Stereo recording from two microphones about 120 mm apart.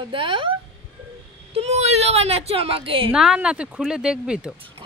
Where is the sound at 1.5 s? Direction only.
60° right (ahead or behind).